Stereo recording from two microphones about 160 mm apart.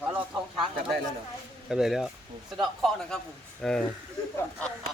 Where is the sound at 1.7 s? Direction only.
5° right (ahead or behind).